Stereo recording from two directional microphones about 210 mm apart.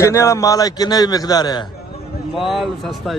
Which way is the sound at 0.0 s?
15° left (ahead or behind).